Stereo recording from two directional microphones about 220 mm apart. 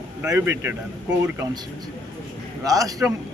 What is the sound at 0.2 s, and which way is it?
Speech, 10° right (ahead or behind).